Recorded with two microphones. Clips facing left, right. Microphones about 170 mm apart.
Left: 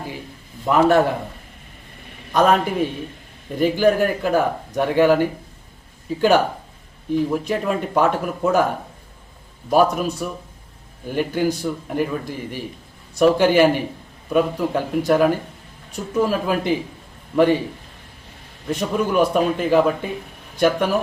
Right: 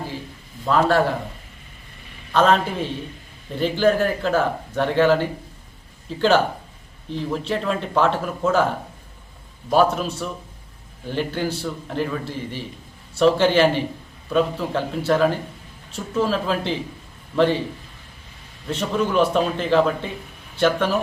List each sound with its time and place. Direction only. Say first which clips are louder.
0.6 s a man's voice: left 3 dB; 20° left (ahead or behind)
2.3 s a man's voice: left 1 dB; 10° left (ahead or behind)
9.6 s a man's voice: left 1 dB; 10° left (ahead or behind)
18.7 s a man's voice: left 1 dB; 10° left (ahead or behind)